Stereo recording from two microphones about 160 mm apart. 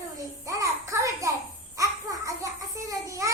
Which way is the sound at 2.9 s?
20° right (ahead or behind).